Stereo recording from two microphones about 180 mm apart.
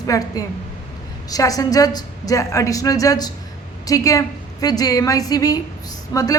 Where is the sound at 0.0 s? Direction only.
20° left (ahead or behind).